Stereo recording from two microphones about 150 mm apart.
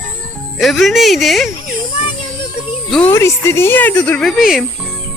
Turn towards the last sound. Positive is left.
turn(degrees=0)  # may be behind; listen again after turning